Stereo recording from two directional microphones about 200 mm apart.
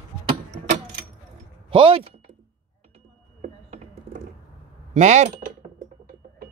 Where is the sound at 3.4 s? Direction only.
35° right (ahead or behind).